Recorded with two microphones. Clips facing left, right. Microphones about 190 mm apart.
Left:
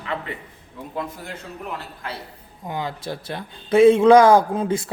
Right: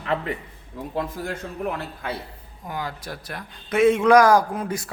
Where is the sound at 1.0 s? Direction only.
50° right (ahead or behind).